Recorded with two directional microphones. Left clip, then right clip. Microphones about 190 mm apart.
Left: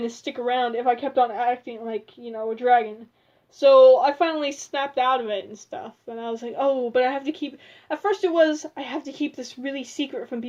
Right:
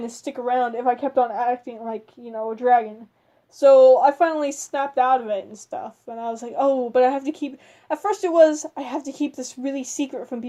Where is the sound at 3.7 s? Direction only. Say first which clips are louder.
Even; 90° right.